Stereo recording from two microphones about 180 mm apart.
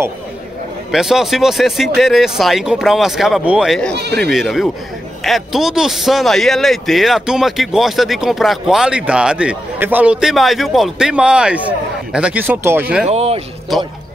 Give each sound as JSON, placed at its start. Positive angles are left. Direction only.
{"t": 0.9, "sound": "a man's voice", "side_deg": 0}
{"t": 3.9, "sound": "speech", "side_deg": -65}
{"t": 4.2, "sound": "a man's voice", "side_deg": 0}
{"t": 13.1, "sound": "speech", "side_deg": -35}
{"t": 13.7, "sound": "a man's voice", "side_deg": 0}